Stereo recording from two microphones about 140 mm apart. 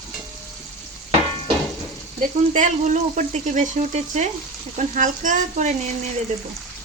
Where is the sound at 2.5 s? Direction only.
60° right (ahead or behind).